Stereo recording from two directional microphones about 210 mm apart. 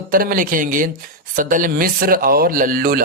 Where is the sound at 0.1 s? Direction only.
40° right (ahead or behind).